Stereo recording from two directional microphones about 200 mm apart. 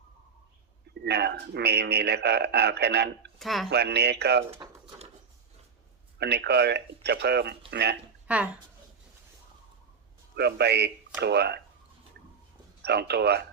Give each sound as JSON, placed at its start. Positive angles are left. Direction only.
{"t": 1.0, "sound": "a man's voice", "side_deg": -55}
{"t": 3.3, "sound": "speech", "side_deg": 0}
{"t": 3.7, "sound": "a man's voice", "side_deg": -55}
{"t": 4.5, "sound": "pigeon", "side_deg": -30}
{"t": 6.1, "sound": "a man's voice", "side_deg": -55}
{"t": 8.3, "sound": "speech", "side_deg": -5}
{"t": 10.3, "sound": "a man's voice", "side_deg": -55}
{"t": 12.8, "sound": "a man's voice", "side_deg": -55}